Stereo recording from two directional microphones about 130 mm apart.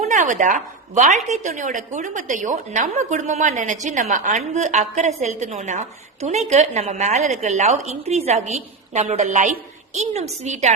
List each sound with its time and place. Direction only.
0.0 s a woman's voice: 75° right (ahead or behind)